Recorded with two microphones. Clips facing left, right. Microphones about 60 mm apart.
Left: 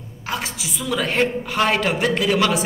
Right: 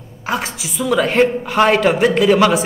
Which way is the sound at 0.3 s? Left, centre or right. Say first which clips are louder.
Right 5 dB; centre.